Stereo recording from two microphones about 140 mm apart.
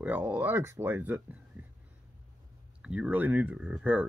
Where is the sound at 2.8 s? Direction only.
5° right (ahead or behind).